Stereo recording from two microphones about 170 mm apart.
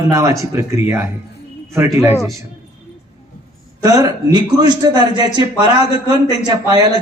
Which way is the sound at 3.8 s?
20° right (ahead or behind).